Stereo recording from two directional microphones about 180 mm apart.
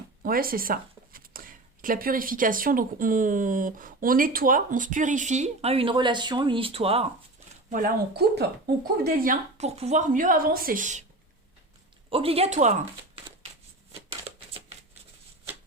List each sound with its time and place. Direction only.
0.2 s speech: 55° right (ahead or behind)
9.0 s speech: 50° right (ahead or behind)
12.1 s speech: 35° right (ahead or behind)
14.1 s shuffling cards: 30° right (ahead or behind)